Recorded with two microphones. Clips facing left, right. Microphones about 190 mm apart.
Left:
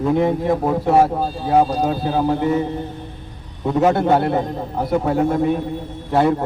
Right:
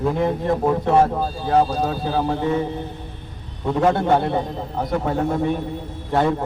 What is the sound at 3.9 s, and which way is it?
Speech, 5° left (ahead or behind).